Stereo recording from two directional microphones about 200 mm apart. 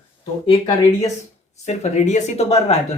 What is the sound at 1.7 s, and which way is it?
Speech, 35° left (ahead or behind).